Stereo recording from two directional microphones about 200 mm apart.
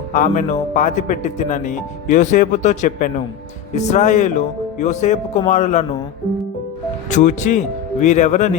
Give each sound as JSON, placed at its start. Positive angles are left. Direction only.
{"t": 0.1, "sound": "a man's voice", "side_deg": 40}
{"t": 7.1, "sound": "a man's voice", "side_deg": 35}